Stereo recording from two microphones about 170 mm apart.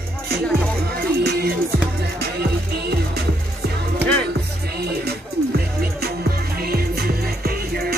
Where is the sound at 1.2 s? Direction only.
70° right (ahead or behind).